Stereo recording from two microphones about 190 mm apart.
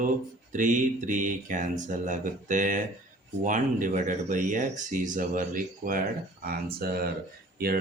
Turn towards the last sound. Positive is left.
turn(degrees=-55)  # may be behind; listen again after turning